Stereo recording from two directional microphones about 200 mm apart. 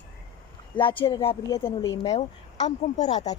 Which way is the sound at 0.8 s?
25° left (ahead or behind).